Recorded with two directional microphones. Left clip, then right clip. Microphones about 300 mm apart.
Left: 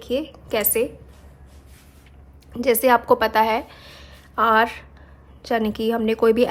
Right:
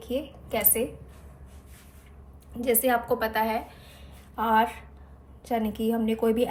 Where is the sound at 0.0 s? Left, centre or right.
Left.